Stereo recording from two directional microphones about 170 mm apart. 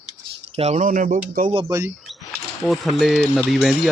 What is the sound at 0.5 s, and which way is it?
Speech, 40° right (ahead or behind).